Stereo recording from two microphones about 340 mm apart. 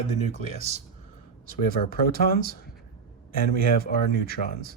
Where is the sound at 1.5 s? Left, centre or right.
Left.